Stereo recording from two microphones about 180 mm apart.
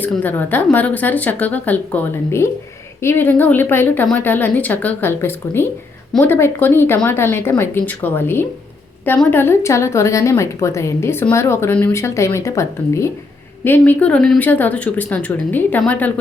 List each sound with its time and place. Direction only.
0.0 s a woman's voice: 10° left (ahead or behind)